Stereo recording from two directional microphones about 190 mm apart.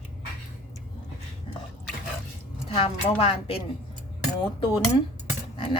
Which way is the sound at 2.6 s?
30° left (ahead or behind).